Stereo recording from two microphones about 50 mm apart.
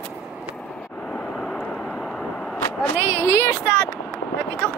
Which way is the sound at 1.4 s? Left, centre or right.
Centre.